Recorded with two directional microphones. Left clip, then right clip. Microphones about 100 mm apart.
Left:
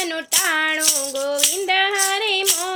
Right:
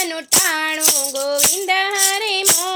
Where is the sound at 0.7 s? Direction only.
20° right (ahead or behind).